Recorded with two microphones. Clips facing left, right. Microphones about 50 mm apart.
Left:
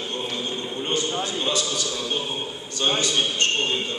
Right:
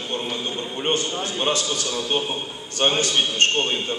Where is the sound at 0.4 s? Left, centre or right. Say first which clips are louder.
Right 3 dB; right.